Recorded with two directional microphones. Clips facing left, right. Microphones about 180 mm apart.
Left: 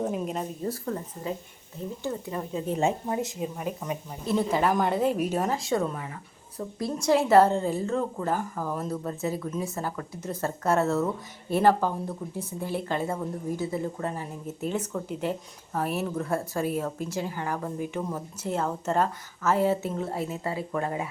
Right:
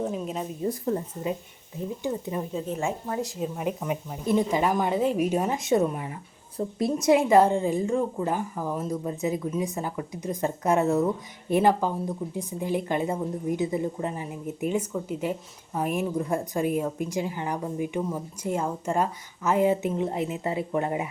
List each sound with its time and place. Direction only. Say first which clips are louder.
0.0 s speech: even; centre (ahead or behind)
0.6 s speech: right 4 dB; 15° right (ahead or behind)
2.6 s speech: left 3 dB; 20° left (ahead or behind)
3.2 s speech: right 1 dB; centre (ahead or behind); by 21.1 s 20° right (ahead or behind)